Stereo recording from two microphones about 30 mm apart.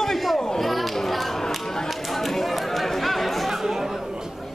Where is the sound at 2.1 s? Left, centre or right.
Centre.